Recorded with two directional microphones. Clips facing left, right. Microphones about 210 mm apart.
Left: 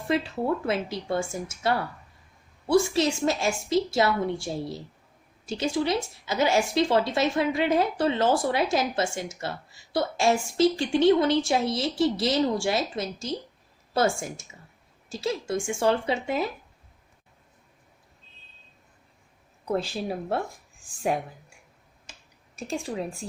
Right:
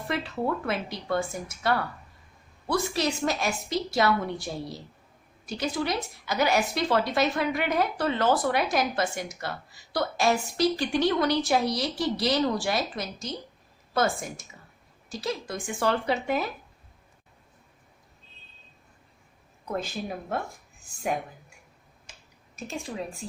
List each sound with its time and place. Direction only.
0.1 s speech: 25° left (ahead or behind)
19.7 s a woman's voice: 35° left (ahead or behind)